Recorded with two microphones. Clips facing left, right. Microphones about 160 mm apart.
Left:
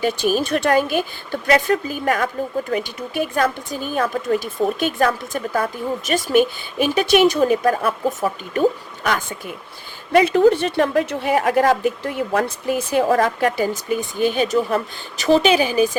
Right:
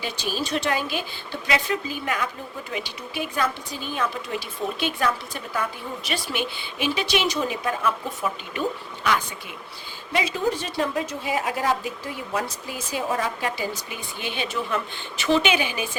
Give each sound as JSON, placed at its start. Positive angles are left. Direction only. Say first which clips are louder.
{"t": 0.0, "sound": "speech", "louder": "left 10 dB", "side_deg": 50}
{"t": 10.1, "sound": "a woman's voice", "louder": "left 11 dB", "side_deg": 60}